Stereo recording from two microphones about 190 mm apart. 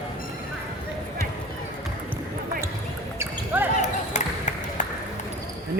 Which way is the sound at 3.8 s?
40° left (ahead or behind).